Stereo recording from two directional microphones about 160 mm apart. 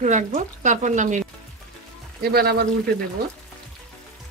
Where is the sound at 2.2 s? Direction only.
80° right.